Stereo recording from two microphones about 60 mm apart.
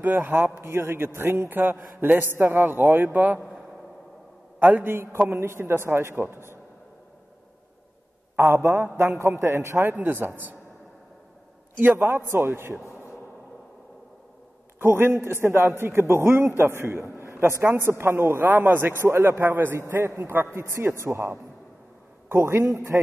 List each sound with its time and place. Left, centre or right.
0.3 s a man's voice: right
4.6 s a man's voice: right
4.8 s a man's voice: right
8.4 s a man's voice: right
11.8 s a man's voice: right
12.1 s a man's voice: right
14.8 s a man's voice: right
18.4 s a man's voice: right